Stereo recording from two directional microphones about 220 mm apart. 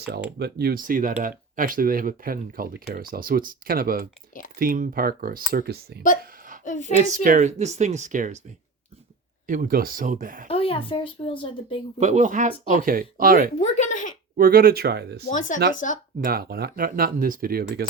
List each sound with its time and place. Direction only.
0.3 s speech: 45° right (ahead or behind)
6.7 s speech: 35° left (ahead or behind)
6.9 s speech: 35° right (ahead or behind)
9.5 s speech: 40° right (ahead or behind)
10.5 s speech: 25° left (ahead or behind)
11.9 s speech: 30° right (ahead or behind)
13.6 s a sound: 30° left (ahead or behind)
14.3 s speech: 40° right (ahead or behind)
15.3 s speech: 35° left (ahead or behind)
16.2 s speech: 45° right (ahead or behind)